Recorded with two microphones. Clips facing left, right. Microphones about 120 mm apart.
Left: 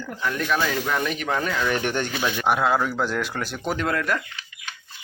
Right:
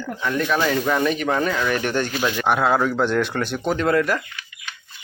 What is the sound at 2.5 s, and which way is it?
A man's voice, centre (ahead or behind).